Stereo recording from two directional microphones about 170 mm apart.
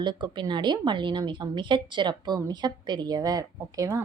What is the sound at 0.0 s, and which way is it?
A woman's voice, 25° right (ahead or behind).